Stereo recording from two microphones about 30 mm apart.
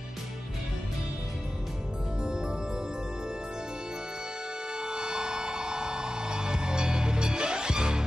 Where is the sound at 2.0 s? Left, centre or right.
Right.